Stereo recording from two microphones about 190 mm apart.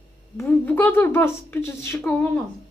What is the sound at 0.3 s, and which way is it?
A woman's voice, 10° left (ahead or behind).